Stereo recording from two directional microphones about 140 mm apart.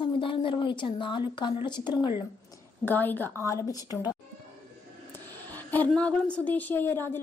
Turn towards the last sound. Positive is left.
turn(degrees=15)  # may be behind; listen again after turning